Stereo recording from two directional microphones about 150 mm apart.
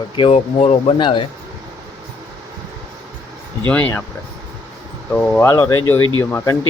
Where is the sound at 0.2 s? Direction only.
45° left (ahead or behind).